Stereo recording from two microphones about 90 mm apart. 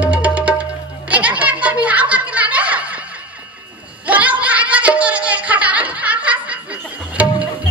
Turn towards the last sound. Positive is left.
turn(degrees=-15)  # may be behind; listen again after turning